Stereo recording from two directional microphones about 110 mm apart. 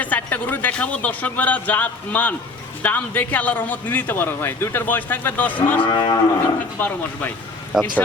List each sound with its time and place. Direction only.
0.0 s a man's voice: 15° left (ahead or behind)
5.8 s cattle: 45° left (ahead or behind)
6.7 s a man's voice: 15° left (ahead or behind)
7.7 s speech: 5° right (ahead or behind)